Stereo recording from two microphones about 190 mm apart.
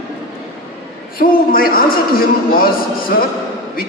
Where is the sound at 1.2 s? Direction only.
50° left (ahead or behind).